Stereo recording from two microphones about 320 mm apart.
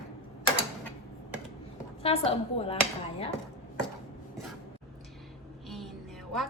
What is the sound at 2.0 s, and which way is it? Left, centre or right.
Speech, centre.